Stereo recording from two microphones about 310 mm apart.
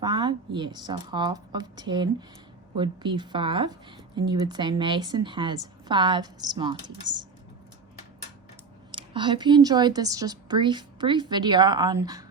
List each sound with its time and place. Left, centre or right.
0.0 s a woman's voice: centre
8.9 s a woman's voice: centre